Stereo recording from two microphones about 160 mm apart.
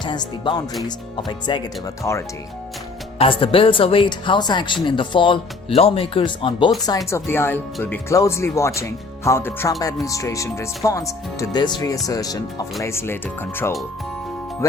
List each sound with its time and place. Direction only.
0.0 s speech: 30° left (ahead or behind)
3.2 s speech: 35° left (ahead or behind)